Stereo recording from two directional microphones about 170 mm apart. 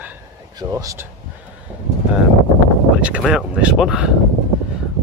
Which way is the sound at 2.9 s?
5° right (ahead or behind).